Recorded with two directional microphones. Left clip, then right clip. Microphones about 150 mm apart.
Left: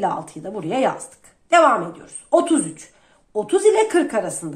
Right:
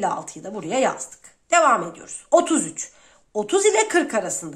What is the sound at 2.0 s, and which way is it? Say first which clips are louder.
A woman's voice: left 1 dB; 35° right (ahead or behind).